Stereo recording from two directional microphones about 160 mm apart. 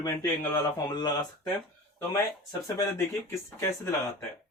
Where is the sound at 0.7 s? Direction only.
25° left (ahead or behind).